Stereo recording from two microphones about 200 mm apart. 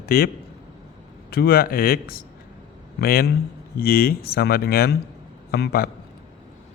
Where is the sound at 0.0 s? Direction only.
50° left (ahead or behind).